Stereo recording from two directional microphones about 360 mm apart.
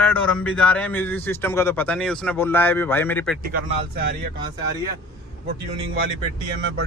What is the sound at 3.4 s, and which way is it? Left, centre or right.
Speech, right.